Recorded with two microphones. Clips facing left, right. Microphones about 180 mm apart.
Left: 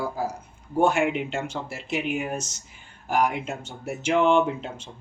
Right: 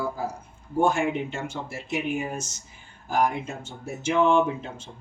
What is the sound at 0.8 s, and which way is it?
Speech, 70° left (ahead or behind).